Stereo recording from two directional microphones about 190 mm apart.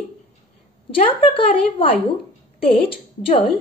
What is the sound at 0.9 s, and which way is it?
A woman's voice, 30° left (ahead or behind).